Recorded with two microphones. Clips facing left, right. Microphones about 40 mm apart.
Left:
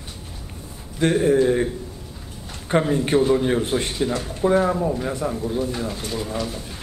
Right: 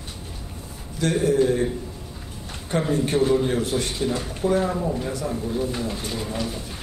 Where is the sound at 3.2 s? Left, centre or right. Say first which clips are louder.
Left 1 dB; centre.